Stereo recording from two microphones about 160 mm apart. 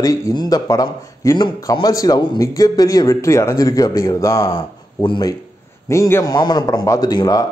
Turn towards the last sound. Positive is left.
turn(degrees=25)  # may be behind; listen again after turning